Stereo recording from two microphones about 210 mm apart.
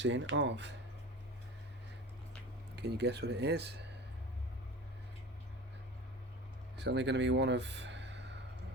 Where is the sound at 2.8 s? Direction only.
55° right (ahead or behind).